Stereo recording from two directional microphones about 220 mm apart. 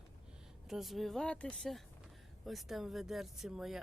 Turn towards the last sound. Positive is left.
turn(degrees=0)  # may be behind; listen again after turning